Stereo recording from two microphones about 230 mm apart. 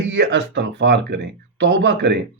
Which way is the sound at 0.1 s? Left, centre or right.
Right.